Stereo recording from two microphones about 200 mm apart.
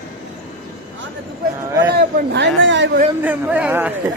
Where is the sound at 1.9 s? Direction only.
55° right (ahead or behind).